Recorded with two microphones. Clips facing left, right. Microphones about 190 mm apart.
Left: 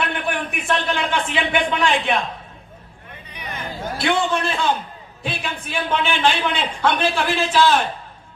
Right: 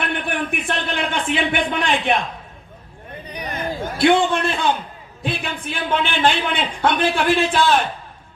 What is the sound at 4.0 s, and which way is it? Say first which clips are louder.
A man's voice: right 5 dB; 55° right (ahead or behind).